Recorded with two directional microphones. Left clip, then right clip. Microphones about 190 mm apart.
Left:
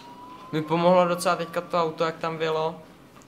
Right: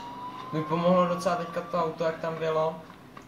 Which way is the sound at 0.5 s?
30° left (ahead or behind).